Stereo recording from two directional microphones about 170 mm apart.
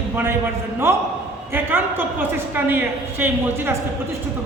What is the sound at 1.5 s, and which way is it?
A woman's voice, 10° right (ahead or behind).